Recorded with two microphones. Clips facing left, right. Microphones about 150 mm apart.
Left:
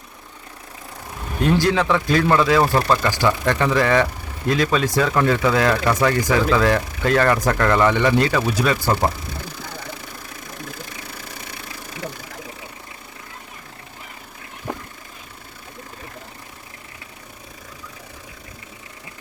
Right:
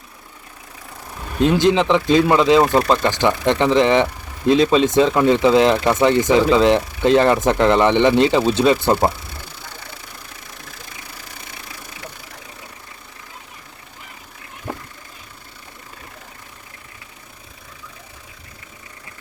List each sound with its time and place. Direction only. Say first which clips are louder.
1.4 s speech: right 3 dB; 20° right (ahead or behind)
14.7 s vehicle: even; 5° right (ahead or behind)